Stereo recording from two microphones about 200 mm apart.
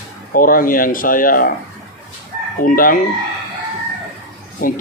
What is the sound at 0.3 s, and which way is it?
Speech, 45° left (ahead or behind).